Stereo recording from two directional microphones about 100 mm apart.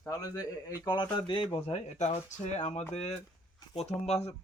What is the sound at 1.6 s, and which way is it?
Speech, 85° left.